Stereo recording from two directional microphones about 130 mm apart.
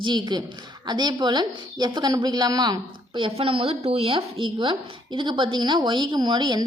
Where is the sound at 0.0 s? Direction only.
35° right (ahead or behind).